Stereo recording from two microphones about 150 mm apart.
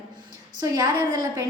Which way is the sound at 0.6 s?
25° right (ahead or behind).